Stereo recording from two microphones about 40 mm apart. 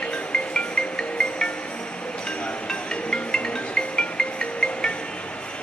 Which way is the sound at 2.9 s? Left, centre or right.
Left.